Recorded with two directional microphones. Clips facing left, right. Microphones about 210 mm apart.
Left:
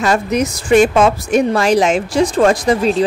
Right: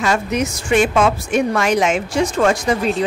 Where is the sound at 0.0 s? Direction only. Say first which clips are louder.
Left 3 dB; 35° left (ahead or behind).